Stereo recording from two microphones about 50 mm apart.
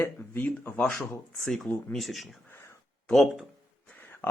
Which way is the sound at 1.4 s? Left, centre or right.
Centre.